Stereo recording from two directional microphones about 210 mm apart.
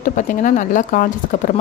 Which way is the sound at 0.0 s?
40° left (ahead or behind).